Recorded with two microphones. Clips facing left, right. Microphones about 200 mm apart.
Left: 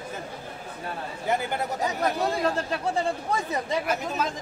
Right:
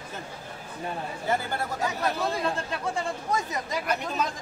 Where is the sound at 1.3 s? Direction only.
15° left (ahead or behind).